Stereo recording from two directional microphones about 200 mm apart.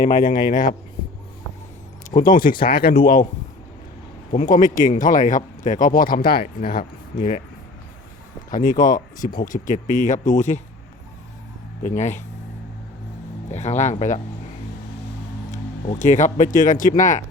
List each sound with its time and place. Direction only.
0.0 s speech: 40° left (ahead or behind)
2.0 s speech: 40° left (ahead or behind)
4.3 s speech: 40° left (ahead or behind)
8.4 s speech: 40° left (ahead or behind)
11.8 s speech: 40° left (ahead or behind)
13.5 s speech: 35° left (ahead or behind)
15.5 s speech: 35° left (ahead or behind)